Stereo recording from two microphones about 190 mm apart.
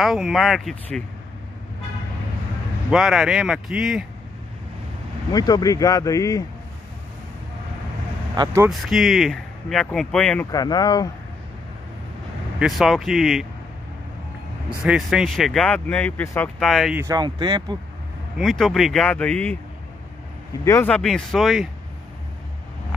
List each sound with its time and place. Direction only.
0.0 s speech: centre (ahead or behind)
2.9 s speech: centre (ahead or behind)
5.3 s speech: 20° left (ahead or behind)
8.6 s speech: centre (ahead or behind)
10.5 s speech: 20° left (ahead or behind)
12.5 s speech: centre (ahead or behind)
14.8 s speech: 5° right (ahead or behind)
17.0 s speech: 20° right (ahead or behind)
18.4 s speech: centre (ahead or behind)
20.6 s speech: 10° left (ahead or behind)